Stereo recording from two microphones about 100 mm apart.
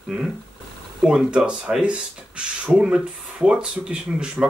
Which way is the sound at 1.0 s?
10° right (ahead or behind).